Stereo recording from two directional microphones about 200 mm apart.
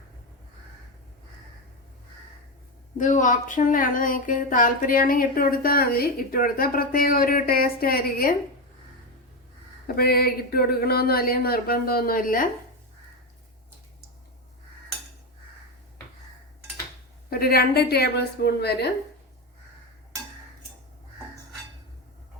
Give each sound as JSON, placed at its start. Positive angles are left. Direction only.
{"t": 3.0, "sound": "speech", "side_deg": 40}
{"t": 9.8, "sound": "speech", "side_deg": 50}
{"t": 17.2, "sound": "speech", "side_deg": 50}